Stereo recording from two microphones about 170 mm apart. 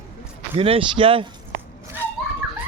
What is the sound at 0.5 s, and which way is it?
Speech, 35° right (ahead or behind).